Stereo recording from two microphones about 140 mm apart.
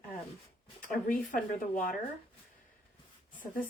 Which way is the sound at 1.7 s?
80° left.